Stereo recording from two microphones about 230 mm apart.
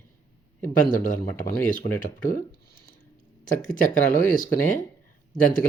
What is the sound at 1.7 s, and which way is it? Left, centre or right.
Speech, left.